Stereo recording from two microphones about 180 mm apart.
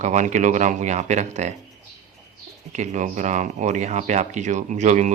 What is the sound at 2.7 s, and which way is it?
Speech, 40° right (ahead or behind).